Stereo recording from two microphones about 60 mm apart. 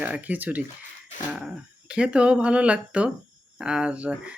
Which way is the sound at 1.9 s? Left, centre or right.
Centre.